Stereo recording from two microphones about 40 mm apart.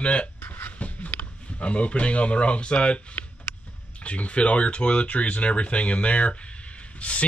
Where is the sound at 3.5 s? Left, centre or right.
Left.